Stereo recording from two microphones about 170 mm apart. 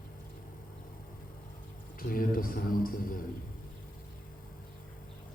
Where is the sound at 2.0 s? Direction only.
55° left (ahead or behind).